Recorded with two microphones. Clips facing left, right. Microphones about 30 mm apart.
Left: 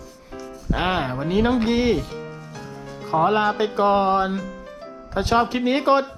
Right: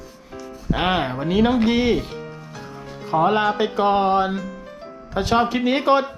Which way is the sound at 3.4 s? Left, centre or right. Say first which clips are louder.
Right 1 dB; centre.